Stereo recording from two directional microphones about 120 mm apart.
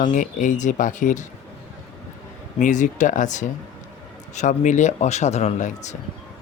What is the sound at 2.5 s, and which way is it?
Speech, 90° left.